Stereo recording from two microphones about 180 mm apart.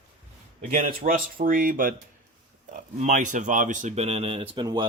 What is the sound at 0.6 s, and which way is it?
Speech, 50° right (ahead or behind).